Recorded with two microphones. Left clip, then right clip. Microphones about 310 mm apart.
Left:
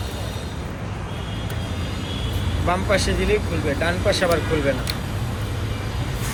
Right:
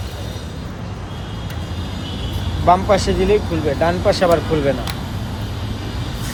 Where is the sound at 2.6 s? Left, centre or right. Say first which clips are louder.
Right 7 dB; right.